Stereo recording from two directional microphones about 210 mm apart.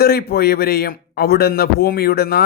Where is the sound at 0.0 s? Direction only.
50° left (ahead or behind).